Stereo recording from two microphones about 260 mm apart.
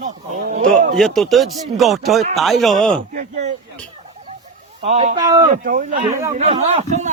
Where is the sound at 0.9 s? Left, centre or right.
Centre.